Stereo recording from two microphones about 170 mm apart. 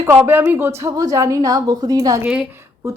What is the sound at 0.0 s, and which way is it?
A woman's voice, 15° right (ahead or behind).